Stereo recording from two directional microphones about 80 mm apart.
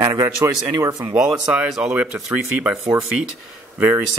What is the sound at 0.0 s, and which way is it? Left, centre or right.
Speech, right.